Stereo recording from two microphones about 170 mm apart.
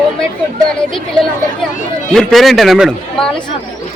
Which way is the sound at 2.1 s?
Centre (ahead or behind).